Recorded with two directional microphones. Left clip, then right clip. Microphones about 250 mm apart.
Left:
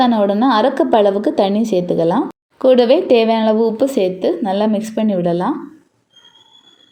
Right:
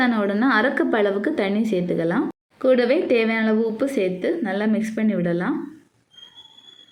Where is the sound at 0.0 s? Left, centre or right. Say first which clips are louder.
Left 7 dB; centre.